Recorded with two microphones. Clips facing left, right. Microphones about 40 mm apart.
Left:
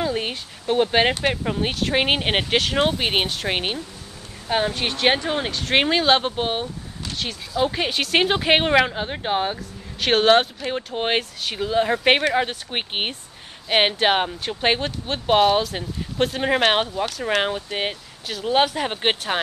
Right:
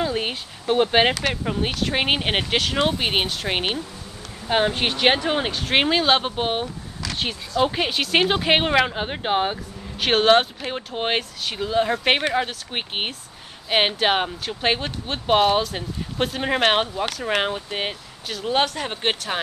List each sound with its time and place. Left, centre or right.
0.0 s a sound: centre
1.3 s speech: centre
4.5 s speech: right
5.6 s speech: centre
7.6 s speech: centre
8.9 s speech: centre